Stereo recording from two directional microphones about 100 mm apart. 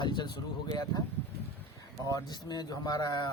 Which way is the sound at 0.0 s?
50° left (ahead or behind).